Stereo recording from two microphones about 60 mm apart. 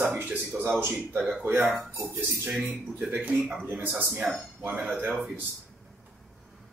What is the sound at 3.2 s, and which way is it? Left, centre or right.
Speech, right.